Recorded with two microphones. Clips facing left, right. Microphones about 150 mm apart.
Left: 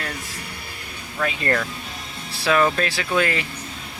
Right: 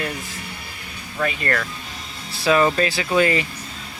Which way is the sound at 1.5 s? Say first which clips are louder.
Left 4 dB; 15° left (ahead or behind).